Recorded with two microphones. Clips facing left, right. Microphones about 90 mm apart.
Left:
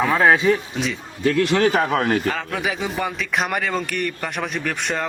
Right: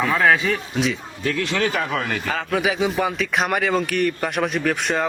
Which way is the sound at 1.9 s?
45° left (ahead or behind).